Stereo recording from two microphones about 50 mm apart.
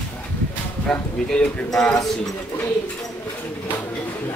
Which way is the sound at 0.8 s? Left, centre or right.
Centre.